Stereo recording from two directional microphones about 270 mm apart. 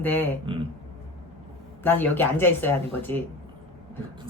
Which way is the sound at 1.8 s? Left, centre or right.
Centre.